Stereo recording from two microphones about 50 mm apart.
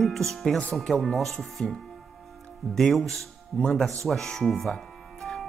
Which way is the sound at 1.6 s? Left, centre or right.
Left.